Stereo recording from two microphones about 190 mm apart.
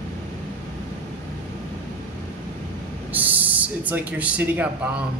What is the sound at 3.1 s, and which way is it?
Speech, 10° right (ahead or behind).